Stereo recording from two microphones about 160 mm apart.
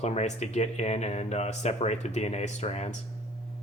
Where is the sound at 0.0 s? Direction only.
40° left (ahead or behind).